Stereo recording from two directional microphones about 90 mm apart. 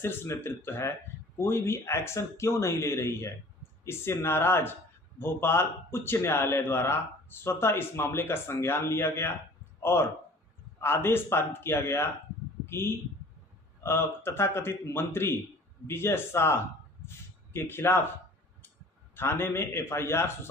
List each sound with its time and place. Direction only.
0.0 s speech: 25° left (ahead or behind)
19.1 s speech: 25° left (ahead or behind)